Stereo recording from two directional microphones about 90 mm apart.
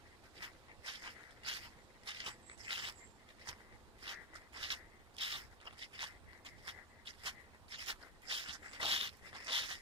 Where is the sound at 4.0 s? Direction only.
85° right.